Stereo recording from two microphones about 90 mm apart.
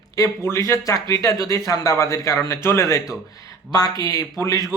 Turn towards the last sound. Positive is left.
turn(degrees=40)  # may be behind; listen again after turning